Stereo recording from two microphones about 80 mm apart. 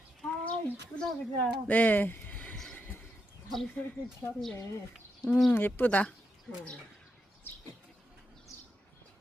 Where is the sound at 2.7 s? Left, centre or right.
Left.